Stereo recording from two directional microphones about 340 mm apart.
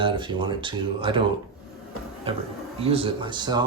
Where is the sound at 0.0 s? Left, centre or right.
Centre.